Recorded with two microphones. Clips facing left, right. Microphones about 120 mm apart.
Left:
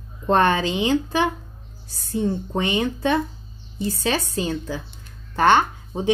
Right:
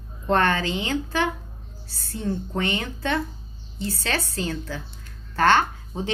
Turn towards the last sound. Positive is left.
turn(degrees=15)  # may be behind; listen again after turning